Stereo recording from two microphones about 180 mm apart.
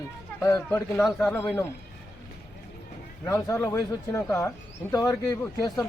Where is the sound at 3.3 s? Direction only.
15° left (ahead or behind).